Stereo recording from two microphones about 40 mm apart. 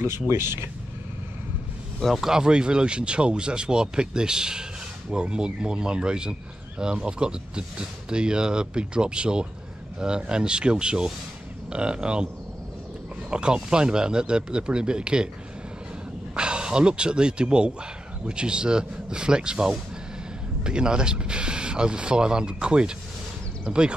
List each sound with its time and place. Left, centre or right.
0.0 s speech: right
2.1 s speech: centre
13.3 s speech: right
16.3 s speech: right